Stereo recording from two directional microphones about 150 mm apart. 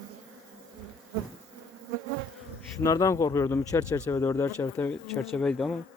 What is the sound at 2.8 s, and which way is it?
Speech, 20° left (ahead or behind).